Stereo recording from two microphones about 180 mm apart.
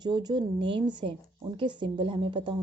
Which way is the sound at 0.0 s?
25° right (ahead or behind).